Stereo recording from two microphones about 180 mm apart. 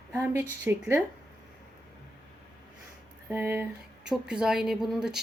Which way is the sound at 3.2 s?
10° right (ahead or behind).